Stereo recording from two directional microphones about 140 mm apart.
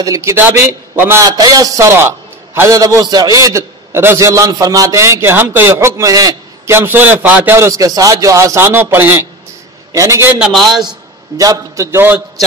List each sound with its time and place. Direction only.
0.0 s a man's voice: 20° right (ahead or behind)
10.4 s a man's voice: centre (ahead or behind)
11.3 s a man's voice: 25° right (ahead or behind)